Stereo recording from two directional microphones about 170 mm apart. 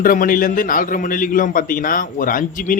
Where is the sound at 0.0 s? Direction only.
55° left (ahead or behind).